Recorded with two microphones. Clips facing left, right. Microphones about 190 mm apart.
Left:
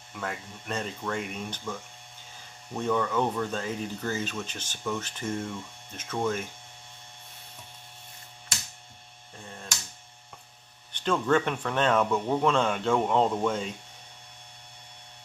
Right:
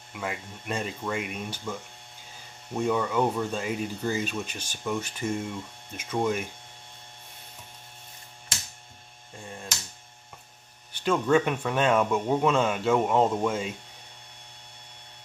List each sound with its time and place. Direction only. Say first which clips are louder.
0.1 s speech: right 1 dB; 10° right (ahead or behind)
10.9 s speech: right 2 dB; 10° right (ahead or behind)